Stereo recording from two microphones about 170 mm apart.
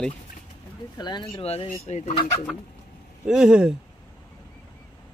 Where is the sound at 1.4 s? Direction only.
35° left (ahead or behind).